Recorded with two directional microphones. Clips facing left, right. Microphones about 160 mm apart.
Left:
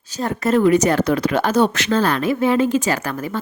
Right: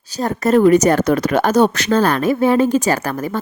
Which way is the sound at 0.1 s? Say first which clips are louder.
Right 3 dB; 40° right (ahead or behind).